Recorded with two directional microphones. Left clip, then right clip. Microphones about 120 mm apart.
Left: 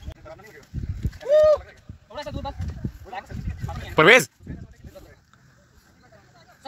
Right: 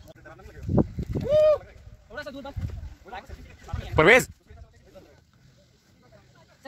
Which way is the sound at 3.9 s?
10° right (ahead or behind).